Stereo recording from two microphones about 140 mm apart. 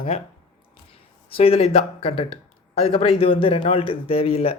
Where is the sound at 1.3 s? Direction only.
45° left (ahead or behind).